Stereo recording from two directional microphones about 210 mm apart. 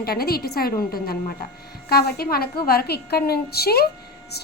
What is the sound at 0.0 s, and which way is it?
A woman's voice, 45° left (ahead or behind).